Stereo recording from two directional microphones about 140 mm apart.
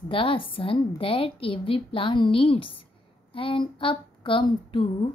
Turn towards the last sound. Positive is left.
turn(degrees=40)  # may be behind; listen again after turning